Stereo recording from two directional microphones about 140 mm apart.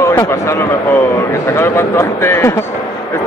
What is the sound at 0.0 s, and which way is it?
A man's voice, 20° left (ahead or behind).